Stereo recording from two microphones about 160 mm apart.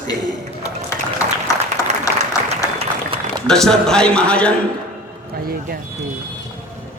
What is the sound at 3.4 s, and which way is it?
A man's voice, 5° left (ahead or behind).